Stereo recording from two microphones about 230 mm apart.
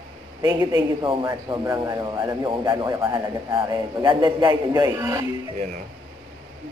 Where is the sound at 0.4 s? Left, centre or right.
Centre.